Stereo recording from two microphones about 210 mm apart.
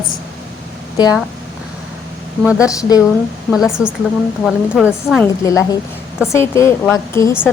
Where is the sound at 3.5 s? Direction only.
Centre (ahead or behind).